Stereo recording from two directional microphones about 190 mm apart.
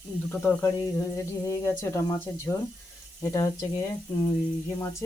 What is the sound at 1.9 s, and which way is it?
Speech, 15° left (ahead or behind).